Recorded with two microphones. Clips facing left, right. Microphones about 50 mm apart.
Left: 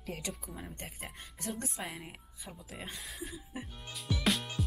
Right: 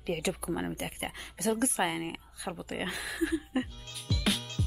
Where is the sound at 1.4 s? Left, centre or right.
Right.